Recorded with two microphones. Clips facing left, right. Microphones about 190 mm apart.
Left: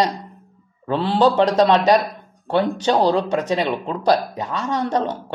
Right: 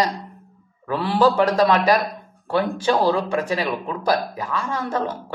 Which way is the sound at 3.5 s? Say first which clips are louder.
Left 3 dB; 25° left (ahead or behind).